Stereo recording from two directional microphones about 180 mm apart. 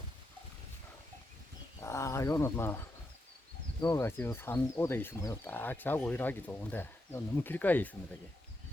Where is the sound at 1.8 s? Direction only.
15° left (ahead or behind).